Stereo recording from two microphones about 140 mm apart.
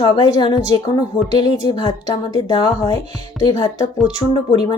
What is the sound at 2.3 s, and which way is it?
Speech, 30° left (ahead or behind).